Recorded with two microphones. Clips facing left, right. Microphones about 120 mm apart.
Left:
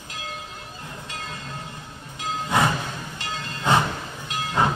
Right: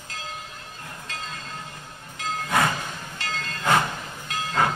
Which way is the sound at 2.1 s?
20° left (ahead or behind).